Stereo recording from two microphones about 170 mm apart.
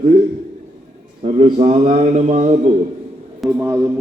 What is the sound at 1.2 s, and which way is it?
Speech, 35° right (ahead or behind).